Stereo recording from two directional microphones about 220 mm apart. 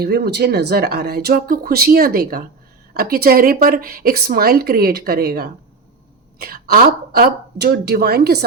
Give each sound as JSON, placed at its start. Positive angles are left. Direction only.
{"t": 0.0, "sound": "a woman's voice", "side_deg": -45}